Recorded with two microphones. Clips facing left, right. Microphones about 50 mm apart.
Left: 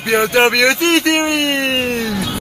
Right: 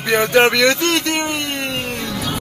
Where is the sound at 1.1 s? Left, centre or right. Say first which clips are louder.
Left 6 dB; left.